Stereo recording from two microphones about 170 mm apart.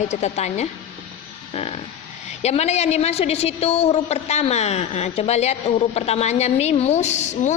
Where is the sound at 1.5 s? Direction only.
35° left (ahead or behind).